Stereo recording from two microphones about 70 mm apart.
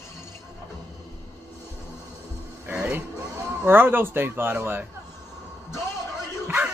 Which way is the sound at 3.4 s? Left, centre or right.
Right.